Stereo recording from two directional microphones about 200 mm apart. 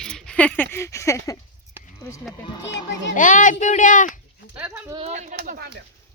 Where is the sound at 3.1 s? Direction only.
40° left (ahead or behind).